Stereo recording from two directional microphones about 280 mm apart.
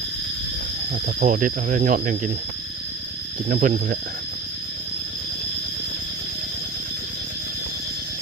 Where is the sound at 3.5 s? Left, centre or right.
Right.